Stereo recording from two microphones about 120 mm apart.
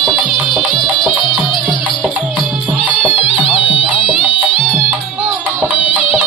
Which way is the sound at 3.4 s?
50° left (ahead or behind).